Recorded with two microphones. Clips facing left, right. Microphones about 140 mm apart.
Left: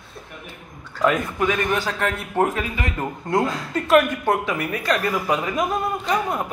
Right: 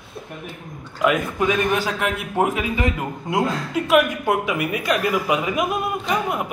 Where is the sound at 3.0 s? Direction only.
5° right (ahead or behind).